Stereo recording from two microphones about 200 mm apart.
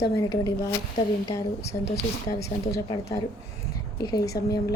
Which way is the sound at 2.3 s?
15° left (ahead or behind).